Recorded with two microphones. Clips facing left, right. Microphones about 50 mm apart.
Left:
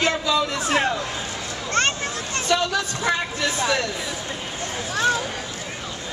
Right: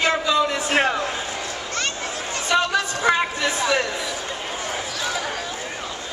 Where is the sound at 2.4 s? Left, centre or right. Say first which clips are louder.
Right 2 dB; right.